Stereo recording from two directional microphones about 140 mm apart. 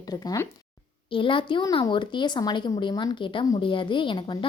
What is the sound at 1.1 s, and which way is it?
A woman's voice, 40° left (ahead or behind).